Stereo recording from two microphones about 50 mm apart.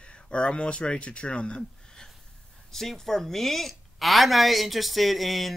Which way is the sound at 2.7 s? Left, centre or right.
Centre.